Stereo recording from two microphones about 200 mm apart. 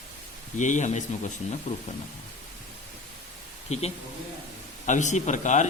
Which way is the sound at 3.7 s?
30° left (ahead or behind).